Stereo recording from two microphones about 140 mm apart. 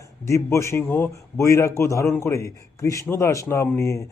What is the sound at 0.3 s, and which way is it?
A man's voice, 20° left (ahead or behind).